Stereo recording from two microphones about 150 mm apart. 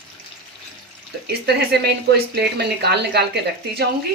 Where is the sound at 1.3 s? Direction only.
90° right.